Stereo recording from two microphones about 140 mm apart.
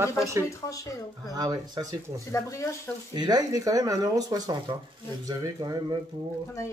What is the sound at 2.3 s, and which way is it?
Speech, 20° left (ahead or behind).